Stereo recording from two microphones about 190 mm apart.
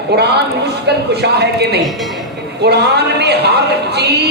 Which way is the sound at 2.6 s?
60° right (ahead or behind).